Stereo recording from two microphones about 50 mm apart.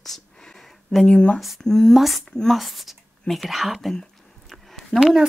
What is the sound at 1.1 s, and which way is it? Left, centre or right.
Speech, left.